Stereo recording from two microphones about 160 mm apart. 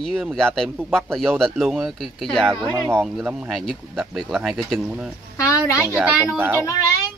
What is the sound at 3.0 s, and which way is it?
Speech, 5° right (ahead or behind).